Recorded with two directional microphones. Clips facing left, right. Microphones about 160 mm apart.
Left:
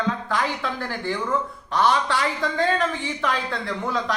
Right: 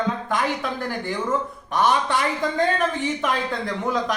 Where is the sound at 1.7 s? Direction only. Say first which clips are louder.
Even; 20° right (ahead or behind).